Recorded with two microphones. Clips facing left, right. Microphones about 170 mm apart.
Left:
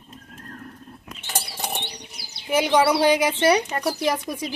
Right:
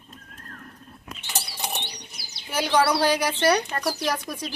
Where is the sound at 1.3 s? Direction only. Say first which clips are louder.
Left 2 dB; 50° left (ahead or behind).